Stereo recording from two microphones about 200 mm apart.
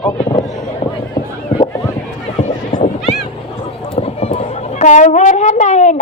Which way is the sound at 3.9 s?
30° left (ahead or behind).